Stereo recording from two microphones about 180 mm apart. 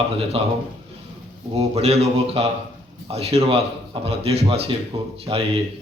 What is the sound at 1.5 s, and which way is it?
A man's voice, 35° right (ahead or behind).